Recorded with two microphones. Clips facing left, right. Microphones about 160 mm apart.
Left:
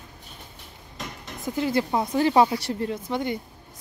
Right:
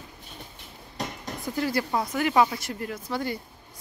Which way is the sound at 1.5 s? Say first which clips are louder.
Left 3 dB; 20° left (ahead or behind).